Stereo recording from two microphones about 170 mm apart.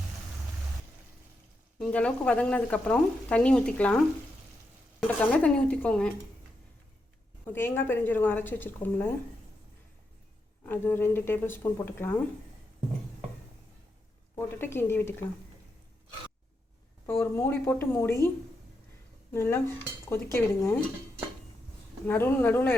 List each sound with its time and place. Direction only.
1.8 s speech: 5° left (ahead or behind)
7.4 s speech: 15° left (ahead or behind)
10.7 s speech: 10° left (ahead or behind)
14.3 s speech: 15° left (ahead or behind)
17.1 s speech: 15° left (ahead or behind)
19.3 s cutlery: 15° left (ahead or behind)
20.3 s speech: 15° left (ahead or behind)
22.0 s speech: 10° left (ahead or behind)